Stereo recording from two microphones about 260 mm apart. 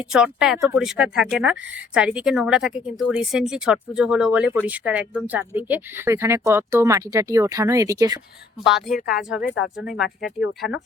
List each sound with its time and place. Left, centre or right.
0.0 s speech: centre
8.6 s speech: centre
10.2 s speech: left